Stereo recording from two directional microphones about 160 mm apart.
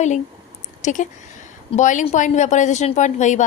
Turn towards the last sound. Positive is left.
turn(degrees=50)  # may be behind; listen again after turning